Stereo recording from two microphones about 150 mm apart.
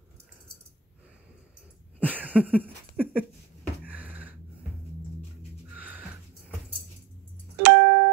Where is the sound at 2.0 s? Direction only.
10° right (ahead or behind).